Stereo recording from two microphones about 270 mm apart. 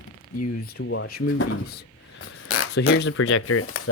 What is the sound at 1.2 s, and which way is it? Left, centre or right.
Speech, left.